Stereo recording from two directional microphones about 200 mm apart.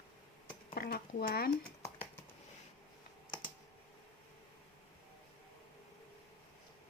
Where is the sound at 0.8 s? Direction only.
50° left (ahead or behind).